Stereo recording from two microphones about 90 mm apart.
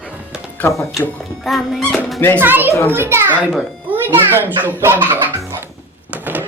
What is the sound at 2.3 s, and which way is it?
A child's voice, 25° right (ahead or behind).